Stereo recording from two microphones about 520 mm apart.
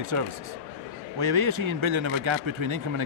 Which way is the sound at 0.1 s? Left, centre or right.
Right.